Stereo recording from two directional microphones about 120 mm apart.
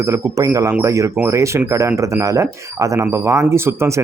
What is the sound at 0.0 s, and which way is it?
Speech, 25° right (ahead or behind).